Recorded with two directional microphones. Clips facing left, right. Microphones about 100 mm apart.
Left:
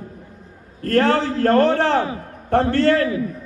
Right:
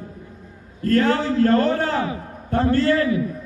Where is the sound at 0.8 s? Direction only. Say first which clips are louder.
Left 1 dB; 60° left (ahead or behind).